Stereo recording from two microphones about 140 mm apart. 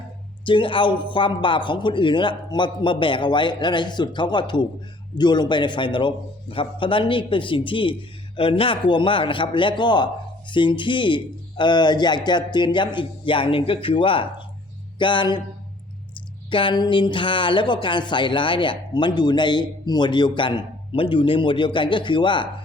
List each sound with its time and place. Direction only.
0.4 s speech: 35° left (ahead or behind)
14.9 s music: 35° left (ahead or behind)
16.5 s speech: 35° left (ahead or behind)